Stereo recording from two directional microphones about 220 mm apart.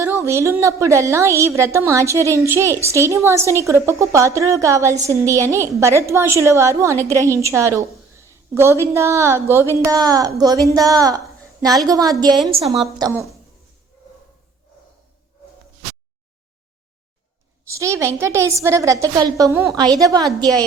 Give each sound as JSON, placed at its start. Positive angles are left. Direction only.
{"t": 0.0, "sound": "a woman's voice", "side_deg": -15}
{"t": 17.7, "sound": "a woman's voice", "side_deg": -15}